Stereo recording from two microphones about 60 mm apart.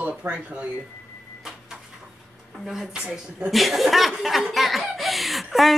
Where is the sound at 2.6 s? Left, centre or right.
Centre.